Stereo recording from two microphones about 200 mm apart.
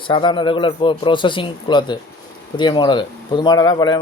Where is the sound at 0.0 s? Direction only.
25° left (ahead or behind).